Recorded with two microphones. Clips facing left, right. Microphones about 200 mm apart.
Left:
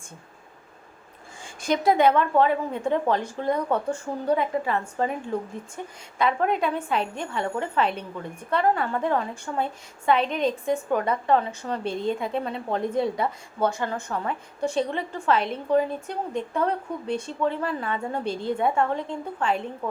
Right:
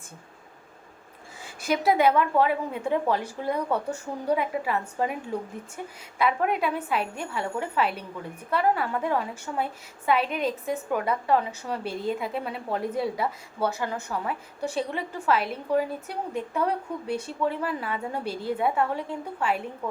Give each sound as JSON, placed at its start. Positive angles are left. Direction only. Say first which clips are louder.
{"t": 1.6, "sound": "a woman's voice", "louder": "left 2 dB", "side_deg": -5}